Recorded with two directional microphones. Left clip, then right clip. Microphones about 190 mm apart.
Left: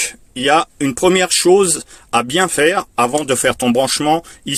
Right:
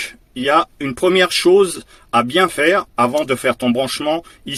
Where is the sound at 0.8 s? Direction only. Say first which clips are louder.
Left 1 dB; 35° left (ahead or behind).